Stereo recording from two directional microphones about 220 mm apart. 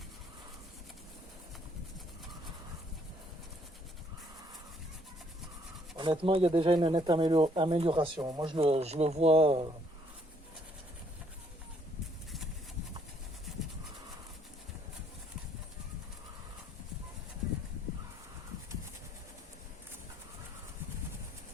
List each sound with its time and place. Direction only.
6.0 s speech: 25° right (ahead or behind)